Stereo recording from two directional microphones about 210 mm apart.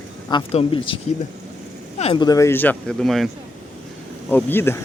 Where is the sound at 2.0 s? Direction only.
25° left (ahead or behind); by 3.2 s centre (ahead or behind).